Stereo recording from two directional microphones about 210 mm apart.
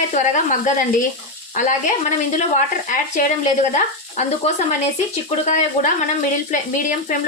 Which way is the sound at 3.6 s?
35° left (ahead or behind).